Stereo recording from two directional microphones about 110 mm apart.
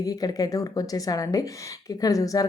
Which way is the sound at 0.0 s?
35° left (ahead or behind).